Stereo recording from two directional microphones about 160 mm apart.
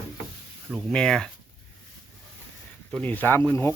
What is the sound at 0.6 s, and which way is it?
Speech, centre (ahead or behind).